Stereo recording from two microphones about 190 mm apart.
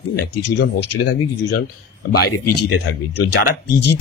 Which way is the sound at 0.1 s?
60° left (ahead or behind).